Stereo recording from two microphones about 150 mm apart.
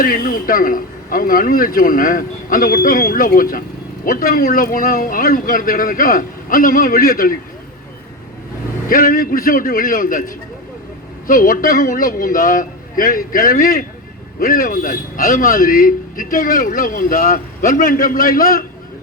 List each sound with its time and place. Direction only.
0.0 s a man's voice: 70° left (ahead or behind)
8.9 s a man's voice: 70° left (ahead or behind)